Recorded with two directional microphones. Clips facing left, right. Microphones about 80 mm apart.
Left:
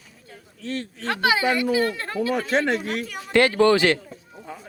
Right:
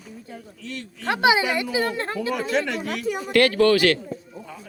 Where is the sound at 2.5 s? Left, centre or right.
Left.